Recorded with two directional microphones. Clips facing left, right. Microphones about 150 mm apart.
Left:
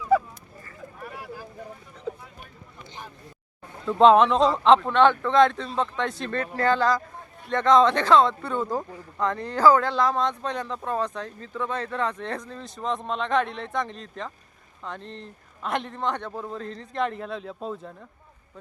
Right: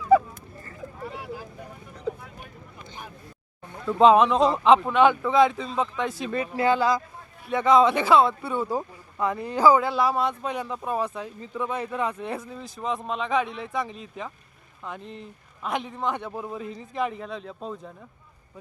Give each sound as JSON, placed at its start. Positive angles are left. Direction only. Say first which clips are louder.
{"t": 1.0, "sound": "vehicle", "louder": "right 2 dB", "side_deg": -20}
{"t": 3.8, "sound": "a man's voice", "louder": "left 1 dB", "side_deg": 0}